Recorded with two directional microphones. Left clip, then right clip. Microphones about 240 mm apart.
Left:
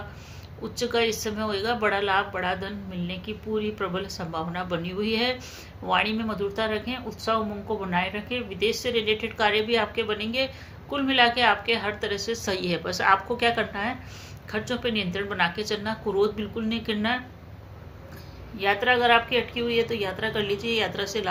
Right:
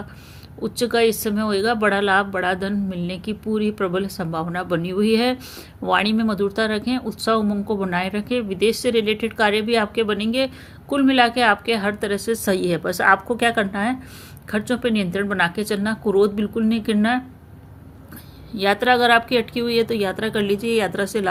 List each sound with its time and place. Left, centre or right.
0.6 s speech: right
18.5 s speech: right